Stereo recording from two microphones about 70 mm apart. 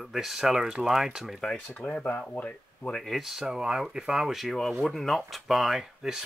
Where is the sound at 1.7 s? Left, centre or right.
Centre.